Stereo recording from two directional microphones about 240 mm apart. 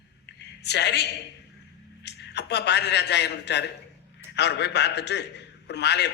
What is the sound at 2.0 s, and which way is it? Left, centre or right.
A man's voice, left.